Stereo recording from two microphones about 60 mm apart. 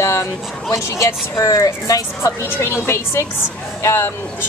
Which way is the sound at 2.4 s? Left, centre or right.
Left.